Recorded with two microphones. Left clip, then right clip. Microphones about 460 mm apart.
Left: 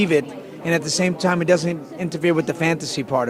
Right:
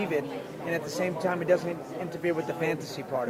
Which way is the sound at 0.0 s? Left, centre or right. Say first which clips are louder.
Left 10 dB; left.